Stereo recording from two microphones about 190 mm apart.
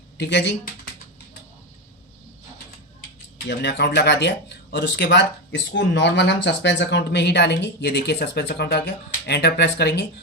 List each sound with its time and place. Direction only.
0.2 s speech: 65° left (ahead or behind)
3.3 s speech: 65° left (ahead or behind)